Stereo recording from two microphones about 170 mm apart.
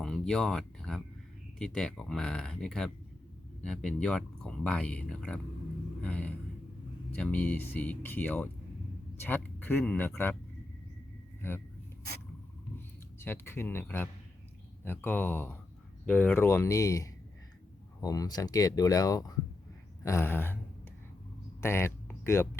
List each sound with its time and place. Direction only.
0.0 s speech: 5° left (ahead or behind)
11.4 s speech: 15° left (ahead or behind)
13.1 s speech: 15° left (ahead or behind)
21.6 s a sound: 15° left (ahead or behind)